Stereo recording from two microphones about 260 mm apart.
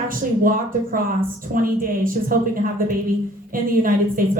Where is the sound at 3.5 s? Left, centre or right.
Right.